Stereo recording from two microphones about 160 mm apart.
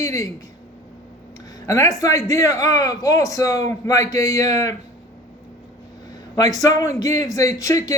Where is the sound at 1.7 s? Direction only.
20° left (ahead or behind).